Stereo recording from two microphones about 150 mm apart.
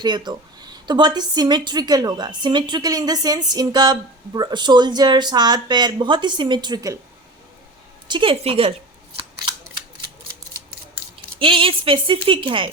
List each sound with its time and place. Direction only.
0.0 s a woman's voice: 30° right (ahead or behind)
8.0 s speech: 35° right (ahead or behind)
11.3 s speech: 35° right (ahead or behind)